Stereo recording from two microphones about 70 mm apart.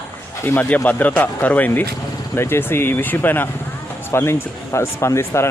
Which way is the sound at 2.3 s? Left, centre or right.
Left.